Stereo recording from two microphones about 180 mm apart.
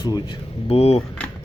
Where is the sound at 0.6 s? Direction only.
35° left (ahead or behind).